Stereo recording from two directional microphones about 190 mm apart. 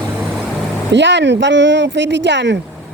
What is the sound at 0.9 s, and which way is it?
Speech, 70° right (ahead or behind).